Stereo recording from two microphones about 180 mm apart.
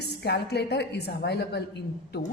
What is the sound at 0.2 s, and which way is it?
A woman's voice, 65° left (ahead or behind).